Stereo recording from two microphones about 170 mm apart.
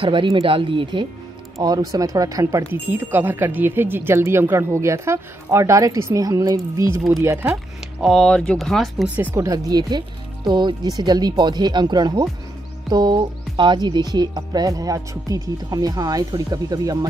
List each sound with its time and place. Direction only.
0.0 s speech: 30° right (ahead or behind)
8.0 s speech: 5° left (ahead or behind); by 17.1 s 20° right (ahead or behind)